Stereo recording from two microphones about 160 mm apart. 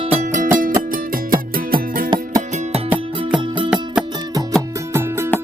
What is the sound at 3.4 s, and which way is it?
Music, 30° right (ahead or behind).